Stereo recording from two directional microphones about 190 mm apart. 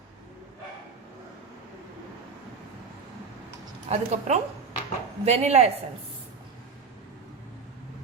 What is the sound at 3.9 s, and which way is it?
A woman's voice, 35° right (ahead or behind).